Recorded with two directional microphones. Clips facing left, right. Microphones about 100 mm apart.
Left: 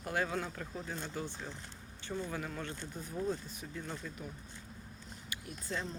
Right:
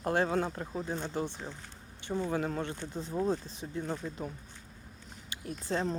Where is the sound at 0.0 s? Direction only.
35° right (ahead or behind).